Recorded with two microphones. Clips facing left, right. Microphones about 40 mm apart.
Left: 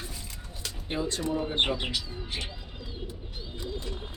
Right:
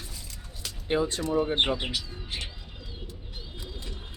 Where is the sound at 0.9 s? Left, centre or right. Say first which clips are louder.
Right 5 dB; right.